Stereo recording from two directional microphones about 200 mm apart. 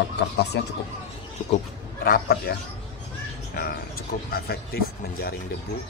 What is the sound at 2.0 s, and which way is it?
Speech, 50° left (ahead or behind).